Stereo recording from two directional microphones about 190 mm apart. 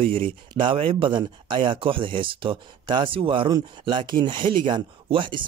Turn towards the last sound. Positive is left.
turn(degrees=-25)  # may be behind; listen again after turning